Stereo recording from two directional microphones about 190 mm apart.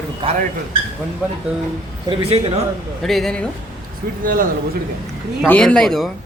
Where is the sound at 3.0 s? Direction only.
Centre (ahead or behind).